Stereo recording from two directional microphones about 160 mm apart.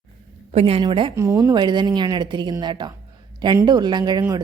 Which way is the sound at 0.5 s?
35° right (ahead or behind).